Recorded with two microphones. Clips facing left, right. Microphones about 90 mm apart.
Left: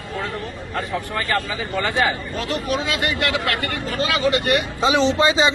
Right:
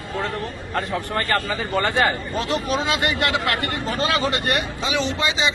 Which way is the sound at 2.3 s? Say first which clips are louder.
Right 1 dB; 25° right (ahead or behind).